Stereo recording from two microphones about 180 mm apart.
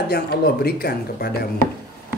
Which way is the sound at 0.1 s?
60° left (ahead or behind).